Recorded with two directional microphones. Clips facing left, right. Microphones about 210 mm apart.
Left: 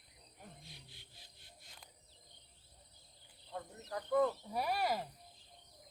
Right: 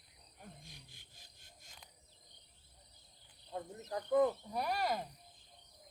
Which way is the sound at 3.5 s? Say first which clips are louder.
Right 2 dB; 20° right (ahead or behind).